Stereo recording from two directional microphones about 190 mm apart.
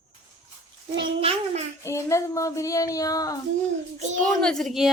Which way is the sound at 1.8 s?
15° left (ahead or behind).